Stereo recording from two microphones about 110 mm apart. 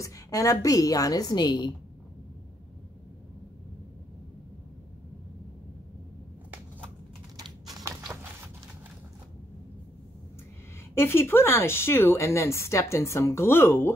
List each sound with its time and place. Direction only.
0.0 s a woman's voice: 30° left (ahead or behind)
7.8 s a sound: 30° right (ahead or behind)
11.0 s speech: 20° left (ahead or behind)